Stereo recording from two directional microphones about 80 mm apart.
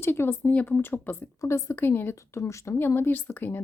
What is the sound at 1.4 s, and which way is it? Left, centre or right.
Speech, left.